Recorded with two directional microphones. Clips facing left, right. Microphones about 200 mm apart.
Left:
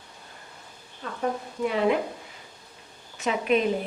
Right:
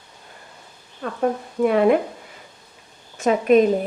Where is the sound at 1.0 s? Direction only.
60° right (ahead or behind).